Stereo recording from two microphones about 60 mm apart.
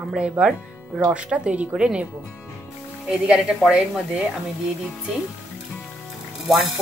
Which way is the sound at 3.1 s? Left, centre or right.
Centre.